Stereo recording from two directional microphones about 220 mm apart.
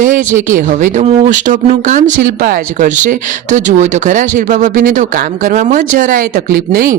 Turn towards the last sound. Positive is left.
turn(degrees=-40)  # may be behind; listen again after turning